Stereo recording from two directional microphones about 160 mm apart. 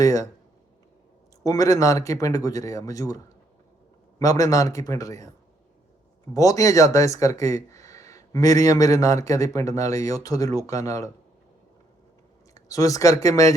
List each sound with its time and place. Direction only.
0.0 s speech: 20° left (ahead or behind)
1.5 s speech: 20° left (ahead or behind)
4.2 s speech: 20° left (ahead or behind)
6.3 s speech: 20° left (ahead or behind)
12.5 s speech: 20° left (ahead or behind)